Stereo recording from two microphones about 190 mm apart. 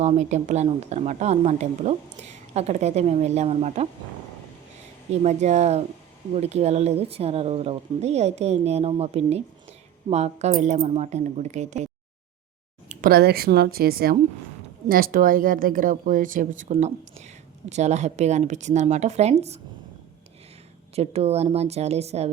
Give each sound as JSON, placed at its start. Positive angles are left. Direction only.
{"t": 0.0, "sound": "speech", "side_deg": -35}
{"t": 5.2, "sound": "speech", "side_deg": -35}
{"t": 12.9, "sound": "speech", "side_deg": -50}
{"t": 20.9, "sound": "speech", "side_deg": -35}